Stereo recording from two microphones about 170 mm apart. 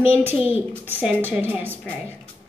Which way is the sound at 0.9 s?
10° right (ahead or behind).